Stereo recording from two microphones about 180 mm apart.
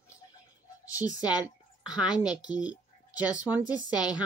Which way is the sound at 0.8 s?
20° left (ahead or behind).